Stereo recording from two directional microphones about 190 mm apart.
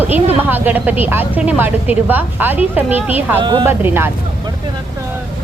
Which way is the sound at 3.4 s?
25° right (ahead or behind).